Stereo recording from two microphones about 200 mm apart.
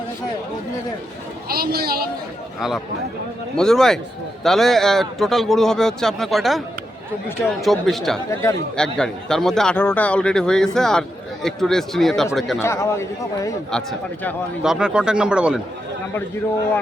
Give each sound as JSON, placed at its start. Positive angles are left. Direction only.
{"t": 1.5, "sound": "a man's voice", "side_deg": -50}
{"t": 2.6, "sound": "speech", "side_deg": 0}
{"t": 7.6, "sound": "speech", "side_deg": 0}
{"t": 8.3, "sound": "speech", "side_deg": 15}
{"t": 8.7, "sound": "speech", "side_deg": 5}
{"t": 12.5, "sound": "speech", "side_deg": 15}
{"t": 14.6, "sound": "speech", "side_deg": -5}